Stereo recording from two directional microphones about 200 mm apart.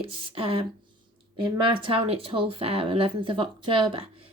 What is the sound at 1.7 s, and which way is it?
Speech, 25° right (ahead or behind).